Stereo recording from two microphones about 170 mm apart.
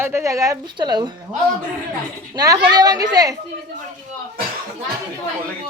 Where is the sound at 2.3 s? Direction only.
20° right (ahead or behind).